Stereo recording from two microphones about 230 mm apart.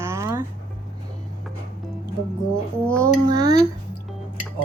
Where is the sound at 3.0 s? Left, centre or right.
Centre.